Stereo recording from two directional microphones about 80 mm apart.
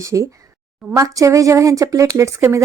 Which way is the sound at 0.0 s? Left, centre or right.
Right.